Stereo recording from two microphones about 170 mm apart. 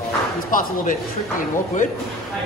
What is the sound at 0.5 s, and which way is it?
Speech, 55° left (ahead or behind).